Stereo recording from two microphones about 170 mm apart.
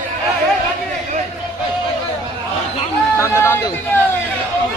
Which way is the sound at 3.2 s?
15° left (ahead or behind).